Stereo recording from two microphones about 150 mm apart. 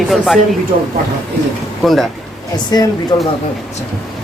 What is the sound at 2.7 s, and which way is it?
Speech, 25° left (ahead or behind).